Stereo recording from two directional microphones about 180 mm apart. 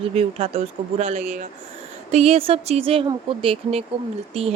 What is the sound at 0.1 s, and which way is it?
A woman's voice, 35° right (ahead or behind).